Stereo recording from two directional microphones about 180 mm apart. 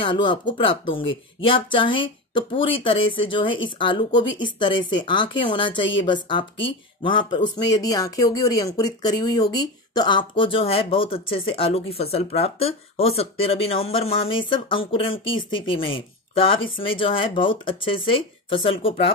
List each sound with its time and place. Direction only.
0.0 s speech: 30° left (ahead or behind)